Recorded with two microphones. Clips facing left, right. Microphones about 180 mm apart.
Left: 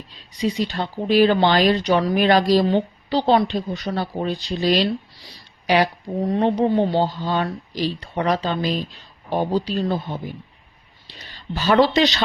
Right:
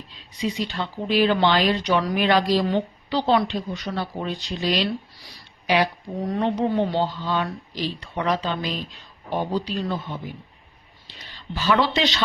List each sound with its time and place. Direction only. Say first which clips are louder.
0.4 s speech: left 4 dB; 40° left (ahead or behind)
6.2 s speech: left 4 dB; 30° left (ahead or behind)
11.5 s speech: left 5 dB; 45° left (ahead or behind)